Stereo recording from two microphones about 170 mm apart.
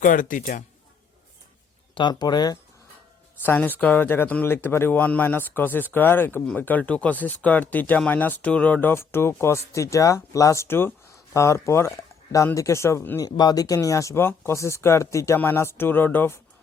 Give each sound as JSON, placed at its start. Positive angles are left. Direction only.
{"t": 0.0, "sound": "speech", "side_deg": 50}
{"t": 2.0, "sound": "speech", "side_deg": 25}
{"t": 3.4, "sound": "speech", "side_deg": 10}